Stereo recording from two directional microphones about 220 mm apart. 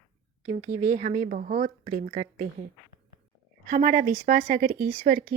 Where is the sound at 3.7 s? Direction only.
35° right (ahead or behind).